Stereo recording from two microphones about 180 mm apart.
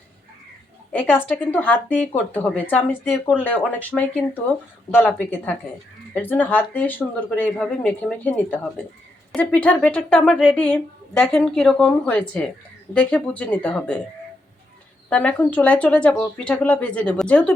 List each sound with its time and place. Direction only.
1.5 s a woman's voice: 10° left (ahead or behind)
15.1 s speech: 5° left (ahead or behind)